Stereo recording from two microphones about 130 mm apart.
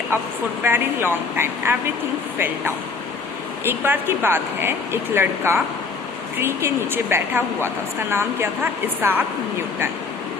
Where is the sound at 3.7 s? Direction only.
15° right (ahead or behind).